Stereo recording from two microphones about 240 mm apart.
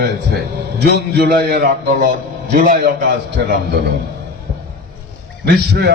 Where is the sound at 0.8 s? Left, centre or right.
Right.